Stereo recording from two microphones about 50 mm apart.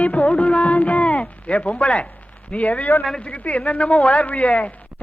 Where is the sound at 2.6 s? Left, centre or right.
Left.